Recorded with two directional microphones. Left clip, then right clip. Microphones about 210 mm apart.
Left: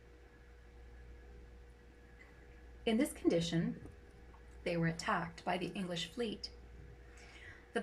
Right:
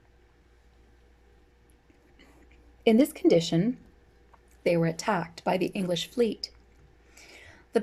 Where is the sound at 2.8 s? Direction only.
50° right (ahead or behind).